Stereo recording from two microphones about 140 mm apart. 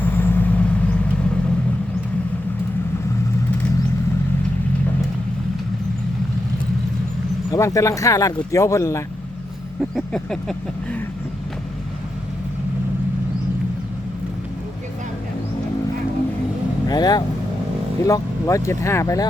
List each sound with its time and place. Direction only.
0.0 s vehicle: 15° left (ahead or behind)
7.5 s speech: 20° left (ahead or behind)
9.9 s a sound: 5° left (ahead or behind)
16.9 s speech: 30° left (ahead or behind)